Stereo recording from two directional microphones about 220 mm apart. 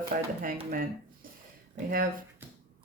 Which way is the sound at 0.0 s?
40° right (ahead or behind).